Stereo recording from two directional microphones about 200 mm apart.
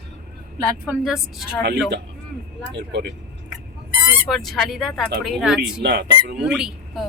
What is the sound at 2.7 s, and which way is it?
Speech, 55° right (ahead or behind).